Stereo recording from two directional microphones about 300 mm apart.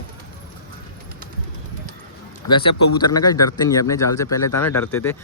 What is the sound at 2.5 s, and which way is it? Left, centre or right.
Speech, centre.